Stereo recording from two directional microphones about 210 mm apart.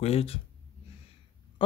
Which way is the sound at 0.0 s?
30° left (ahead or behind).